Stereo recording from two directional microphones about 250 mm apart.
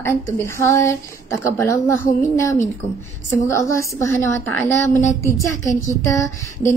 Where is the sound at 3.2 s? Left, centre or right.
Centre.